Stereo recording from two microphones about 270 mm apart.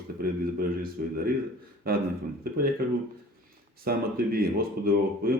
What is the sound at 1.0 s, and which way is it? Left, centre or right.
Speech, right.